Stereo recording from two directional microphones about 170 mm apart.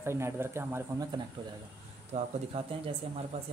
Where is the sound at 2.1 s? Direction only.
45° right (ahead or behind).